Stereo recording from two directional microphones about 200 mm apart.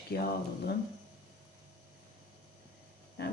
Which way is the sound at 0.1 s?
50° left (ahead or behind).